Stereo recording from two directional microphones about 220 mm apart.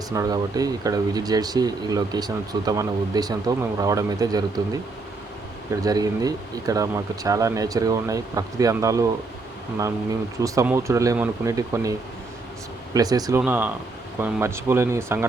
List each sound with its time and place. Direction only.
0.1 s speech: 15° right (ahead or behind)
5.8 s speech: 15° right (ahead or behind)
10.4 s speech: 15° right (ahead or behind)